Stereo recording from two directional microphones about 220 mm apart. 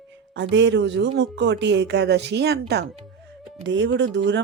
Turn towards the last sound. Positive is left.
turn(degrees=-55)  # may be behind; listen again after turning